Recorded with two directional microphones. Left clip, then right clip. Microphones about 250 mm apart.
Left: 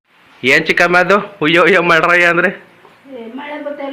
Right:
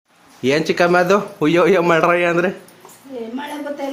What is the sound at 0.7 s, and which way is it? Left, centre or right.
A man's voice, centre.